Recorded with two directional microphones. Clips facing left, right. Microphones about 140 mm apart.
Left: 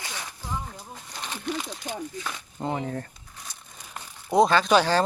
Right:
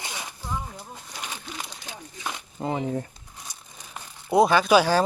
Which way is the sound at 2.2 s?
20° right (ahead or behind).